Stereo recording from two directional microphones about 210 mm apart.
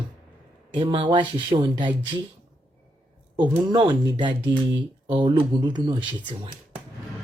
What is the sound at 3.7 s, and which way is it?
Speech, 20° right (ahead or behind).